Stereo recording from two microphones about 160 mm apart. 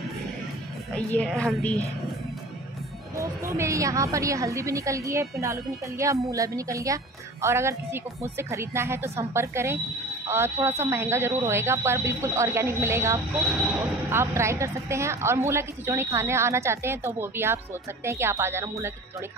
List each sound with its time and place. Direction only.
0.9 s speech: 5° left (ahead or behind)
3.2 s a woman's voice: 20° right (ahead or behind)